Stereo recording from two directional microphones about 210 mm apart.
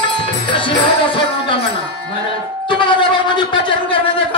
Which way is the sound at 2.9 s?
25° left (ahead or behind).